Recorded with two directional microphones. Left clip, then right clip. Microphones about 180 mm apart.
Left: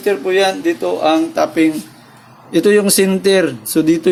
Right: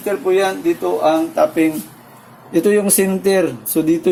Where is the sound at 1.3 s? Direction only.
25° left (ahead or behind).